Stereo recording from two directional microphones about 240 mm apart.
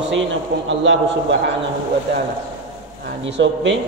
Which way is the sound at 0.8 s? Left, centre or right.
Right.